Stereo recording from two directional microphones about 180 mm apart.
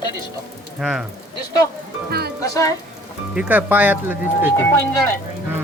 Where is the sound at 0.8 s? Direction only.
Centre (ahead or behind).